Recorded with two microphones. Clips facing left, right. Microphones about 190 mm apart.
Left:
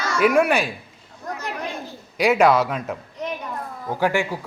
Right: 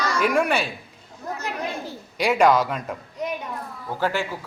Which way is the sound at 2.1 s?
5° left (ahead or behind).